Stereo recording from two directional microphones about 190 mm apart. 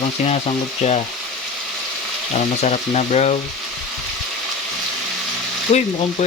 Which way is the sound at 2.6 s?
35° left (ahead or behind).